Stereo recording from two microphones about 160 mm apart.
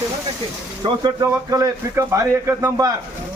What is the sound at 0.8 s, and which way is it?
A man's voice, 30° right (ahead or behind).